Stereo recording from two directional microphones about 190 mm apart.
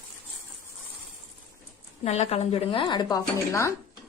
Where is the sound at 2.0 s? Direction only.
30° left (ahead or behind); by 3.7 s 15° left (ahead or behind).